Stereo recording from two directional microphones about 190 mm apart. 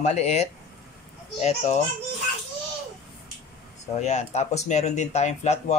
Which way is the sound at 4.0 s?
35° left (ahead or behind).